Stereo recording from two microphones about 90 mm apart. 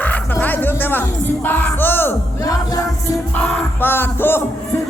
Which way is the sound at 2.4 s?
40° left (ahead or behind).